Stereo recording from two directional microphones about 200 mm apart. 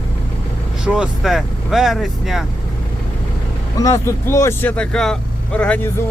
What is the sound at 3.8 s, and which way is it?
Speech, 15° left (ahead or behind).